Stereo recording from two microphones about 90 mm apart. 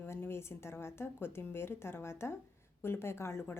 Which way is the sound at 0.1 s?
30° left (ahead or behind).